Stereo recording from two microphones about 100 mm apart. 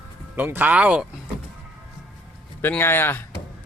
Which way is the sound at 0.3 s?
20° right (ahead or behind).